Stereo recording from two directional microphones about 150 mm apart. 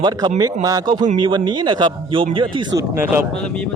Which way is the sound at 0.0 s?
30° right (ahead or behind).